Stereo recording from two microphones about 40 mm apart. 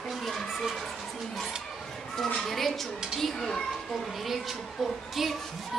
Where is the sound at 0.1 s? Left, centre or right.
Centre.